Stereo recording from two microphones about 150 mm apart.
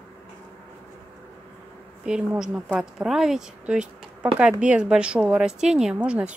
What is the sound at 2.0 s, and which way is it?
A woman's voice, 5° right (ahead or behind).